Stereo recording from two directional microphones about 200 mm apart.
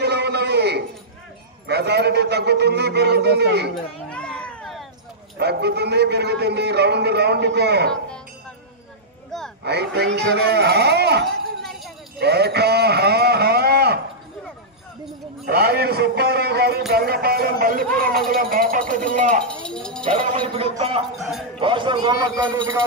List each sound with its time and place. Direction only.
0.0 s a sound: 55° right (ahead or behind)
1.7 s a man's voice: 55° right (ahead or behind)
4.1 s a sound: 5° left (ahead or behind)
5.4 s a man's voice: 55° right (ahead or behind)
9.7 s a man's voice: 55° right (ahead or behind)
12.2 s a sound: 55° right (ahead or behind)
15.4 s a man's voice: 50° right (ahead or behind)
19.6 s music: 5° left (ahead or behind)
20.1 s a man's voice: 30° right (ahead or behind)
21.2 s speech: centre (ahead or behind)
21.5 s a man's voice: 25° right (ahead or behind)